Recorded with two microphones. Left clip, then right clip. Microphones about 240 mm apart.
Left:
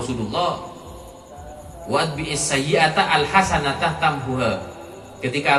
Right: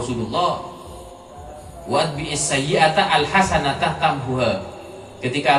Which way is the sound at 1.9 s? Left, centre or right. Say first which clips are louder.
Right 1 dB; left.